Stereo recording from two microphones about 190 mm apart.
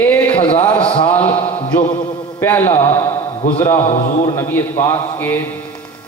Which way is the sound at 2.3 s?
10° left (ahead or behind).